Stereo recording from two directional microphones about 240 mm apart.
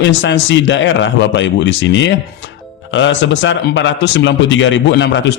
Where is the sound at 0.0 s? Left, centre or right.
Left.